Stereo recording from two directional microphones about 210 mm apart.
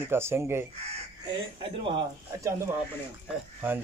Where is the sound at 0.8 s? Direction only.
25° right (ahead or behind).